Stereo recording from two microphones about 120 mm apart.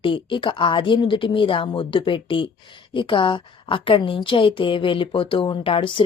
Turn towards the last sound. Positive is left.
turn(degrees=50)  # may be behind; listen again after turning